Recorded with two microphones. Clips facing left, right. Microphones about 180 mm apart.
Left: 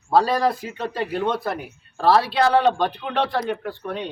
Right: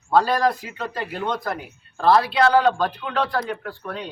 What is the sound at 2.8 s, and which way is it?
A man's voice, 25° left (ahead or behind).